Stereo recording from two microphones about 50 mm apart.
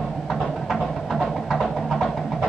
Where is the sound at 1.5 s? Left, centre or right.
Centre.